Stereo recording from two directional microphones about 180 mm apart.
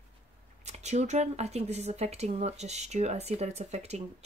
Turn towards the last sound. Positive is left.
turn(degrees=-40)  # may be behind; listen again after turning